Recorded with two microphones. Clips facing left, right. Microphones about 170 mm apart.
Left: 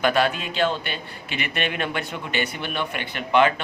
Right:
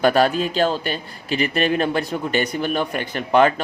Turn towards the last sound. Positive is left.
turn(degrees=-40)  # may be behind; listen again after turning